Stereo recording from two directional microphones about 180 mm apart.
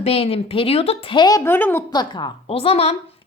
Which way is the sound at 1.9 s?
25° left (ahead or behind).